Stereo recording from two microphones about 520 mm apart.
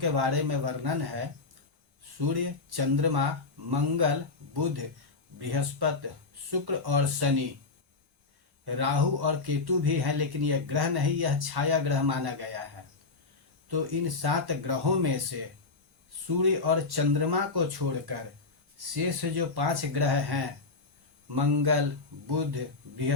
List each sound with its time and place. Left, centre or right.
0.0 s speech: right
8.6 s speech: right
13.7 s speech: right
19.2 s speech: right